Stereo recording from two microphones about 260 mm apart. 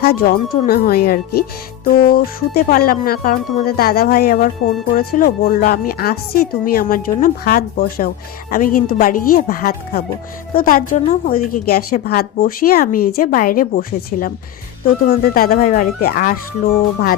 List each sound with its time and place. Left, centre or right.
0.0 s a woman's voice: left